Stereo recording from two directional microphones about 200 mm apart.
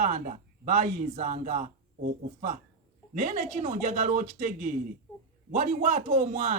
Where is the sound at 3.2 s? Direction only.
40° right (ahead or behind).